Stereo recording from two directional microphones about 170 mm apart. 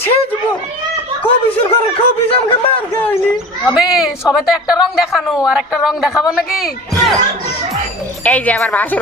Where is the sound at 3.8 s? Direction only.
5° right (ahead or behind).